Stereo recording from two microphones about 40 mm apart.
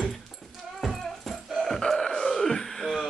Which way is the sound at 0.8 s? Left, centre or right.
Centre.